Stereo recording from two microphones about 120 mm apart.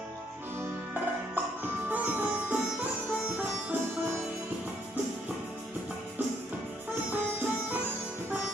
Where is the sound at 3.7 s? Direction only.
20° right (ahead or behind).